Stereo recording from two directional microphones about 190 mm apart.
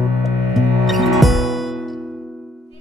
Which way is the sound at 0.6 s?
Centre (ahead or behind).